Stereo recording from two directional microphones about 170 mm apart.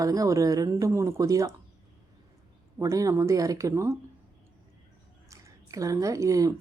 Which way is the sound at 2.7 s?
20° right (ahead or behind).